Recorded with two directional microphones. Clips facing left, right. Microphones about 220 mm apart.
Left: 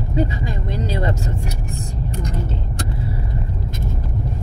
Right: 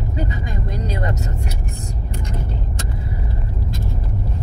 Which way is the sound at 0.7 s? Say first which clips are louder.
Left 3 dB; 25° left (ahead or behind).